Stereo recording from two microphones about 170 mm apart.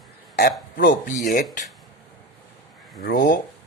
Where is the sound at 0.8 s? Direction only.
55° left (ahead or behind).